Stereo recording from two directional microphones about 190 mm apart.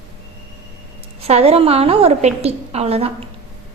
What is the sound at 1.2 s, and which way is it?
A woman's voice, 35° right (ahead or behind).